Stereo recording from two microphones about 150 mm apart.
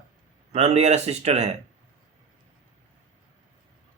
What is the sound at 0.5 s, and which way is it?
Speech, 45° right (ahead or behind).